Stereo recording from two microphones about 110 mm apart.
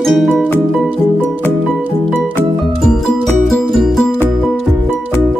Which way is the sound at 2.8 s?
Centre (ahead or behind).